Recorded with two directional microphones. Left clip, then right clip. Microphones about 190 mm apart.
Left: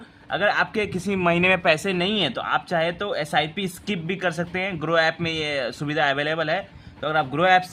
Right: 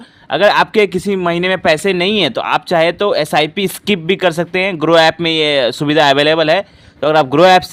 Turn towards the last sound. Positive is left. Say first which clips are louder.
# right 10 dB
turn(degrees=-45)  # may be behind; listen again after turning